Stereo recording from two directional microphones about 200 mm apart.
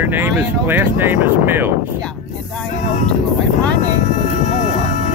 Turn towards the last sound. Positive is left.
turn(degrees=40)  # may be behind; listen again after turning